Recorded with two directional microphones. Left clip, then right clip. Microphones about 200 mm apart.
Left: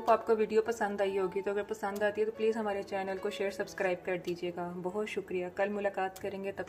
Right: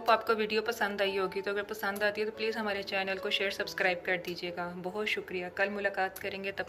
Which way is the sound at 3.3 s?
40° left (ahead or behind).